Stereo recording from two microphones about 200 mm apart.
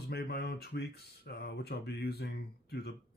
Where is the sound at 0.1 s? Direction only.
50° left (ahead or behind).